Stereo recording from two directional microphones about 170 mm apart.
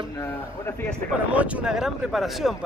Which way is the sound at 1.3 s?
10° right (ahead or behind).